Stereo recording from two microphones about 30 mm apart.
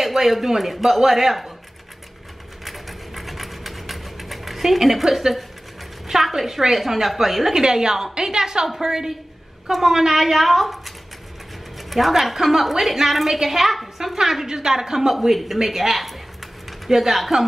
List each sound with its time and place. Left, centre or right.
0.0 s a woman's voice: centre
2.6 s a sound: centre
6.2 s a woman's voice: centre
7.5 s a woman's voice: right; by 10.8 s centre
11.9 s a woman's voice: centre